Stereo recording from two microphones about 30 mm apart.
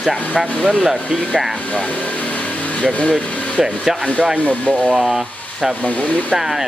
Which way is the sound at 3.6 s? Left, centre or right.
Centre.